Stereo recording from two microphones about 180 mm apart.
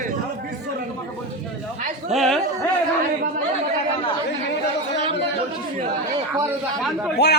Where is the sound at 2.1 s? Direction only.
Centre (ahead or behind).